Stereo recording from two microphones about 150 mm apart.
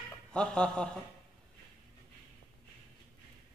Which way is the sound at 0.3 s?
5° left (ahead or behind).